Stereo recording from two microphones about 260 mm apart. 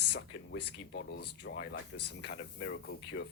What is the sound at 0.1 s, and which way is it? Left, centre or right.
Speech, left.